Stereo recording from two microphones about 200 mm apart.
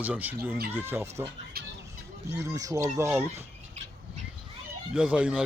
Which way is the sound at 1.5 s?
50° right (ahead or behind).